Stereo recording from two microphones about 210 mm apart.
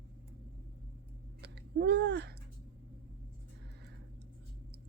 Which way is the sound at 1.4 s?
55° right (ahead or behind).